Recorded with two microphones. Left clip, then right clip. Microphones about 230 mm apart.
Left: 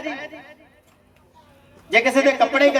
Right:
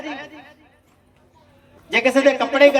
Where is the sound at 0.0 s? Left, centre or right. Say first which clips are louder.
Left 2 dB; centre.